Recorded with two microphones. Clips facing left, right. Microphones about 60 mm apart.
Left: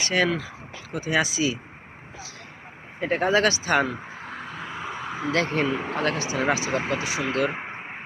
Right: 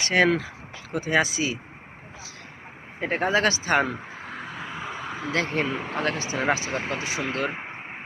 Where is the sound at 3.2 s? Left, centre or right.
Centre.